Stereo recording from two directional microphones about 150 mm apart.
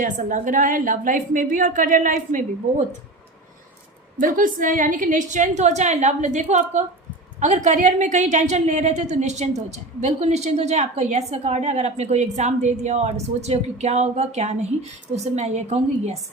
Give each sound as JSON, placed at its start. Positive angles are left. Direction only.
{"t": 0.0, "sound": "a woman's voice", "side_deg": -60}
{"t": 4.2, "sound": "a woman's voice", "side_deg": -65}